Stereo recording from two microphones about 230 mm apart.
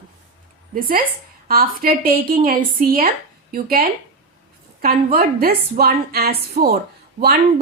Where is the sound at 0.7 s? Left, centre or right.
Right.